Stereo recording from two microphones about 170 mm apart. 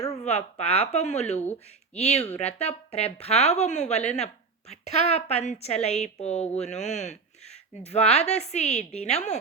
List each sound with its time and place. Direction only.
0.1 s a woman's voice: 40° left (ahead or behind)